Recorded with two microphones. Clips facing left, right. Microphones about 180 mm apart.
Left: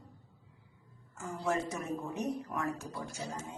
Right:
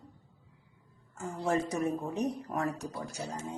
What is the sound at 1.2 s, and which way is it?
Speech, 30° right (ahead or behind).